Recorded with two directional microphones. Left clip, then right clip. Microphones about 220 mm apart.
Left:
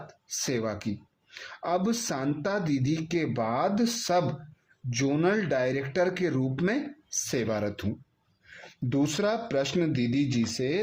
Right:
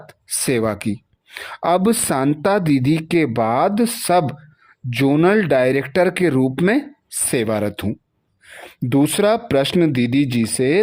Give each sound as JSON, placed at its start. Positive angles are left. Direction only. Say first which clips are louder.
{"t": 0.1, "sound": "speech", "louder": "right 11 dB", "side_deg": -45}